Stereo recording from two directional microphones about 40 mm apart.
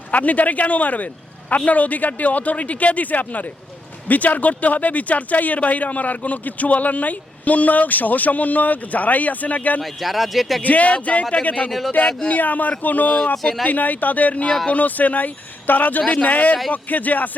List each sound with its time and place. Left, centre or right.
0.1 s speech: left
9.8 s speech: centre
10.6 s a man's voice: left